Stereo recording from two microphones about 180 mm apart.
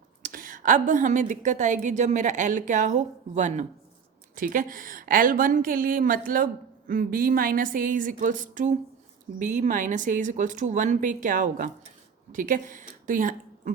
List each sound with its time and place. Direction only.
0.2 s a woman's voice: 50° right (ahead or behind)